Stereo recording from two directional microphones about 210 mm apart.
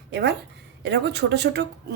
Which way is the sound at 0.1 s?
55° right (ahead or behind).